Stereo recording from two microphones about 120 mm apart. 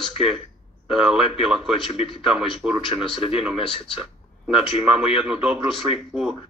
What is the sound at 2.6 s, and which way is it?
Speech, 5° right (ahead or behind).